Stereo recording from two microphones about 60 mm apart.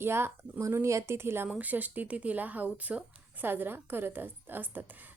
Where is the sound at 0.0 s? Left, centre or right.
Right.